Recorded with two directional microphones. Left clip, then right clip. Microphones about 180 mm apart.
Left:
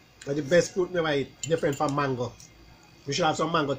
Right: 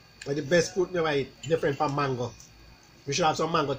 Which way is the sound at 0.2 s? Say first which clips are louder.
Left 2 dB; 5° right (ahead or behind).